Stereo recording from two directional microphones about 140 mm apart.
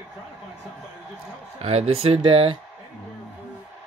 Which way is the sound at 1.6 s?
45° right (ahead or behind).